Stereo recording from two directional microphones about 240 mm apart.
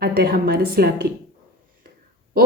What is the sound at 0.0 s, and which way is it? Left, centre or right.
A woman's voice, right.